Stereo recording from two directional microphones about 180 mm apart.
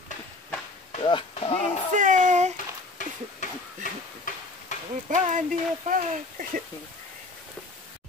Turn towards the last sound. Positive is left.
turn(degrees=-50)  # may be behind; listen again after turning